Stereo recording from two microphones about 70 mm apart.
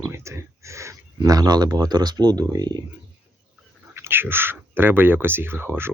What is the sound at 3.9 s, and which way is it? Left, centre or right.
Speech, right.